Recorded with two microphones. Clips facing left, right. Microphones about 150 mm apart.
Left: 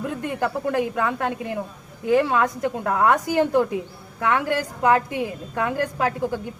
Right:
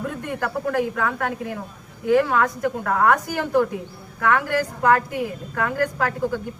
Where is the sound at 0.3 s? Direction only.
20° left (ahead or behind).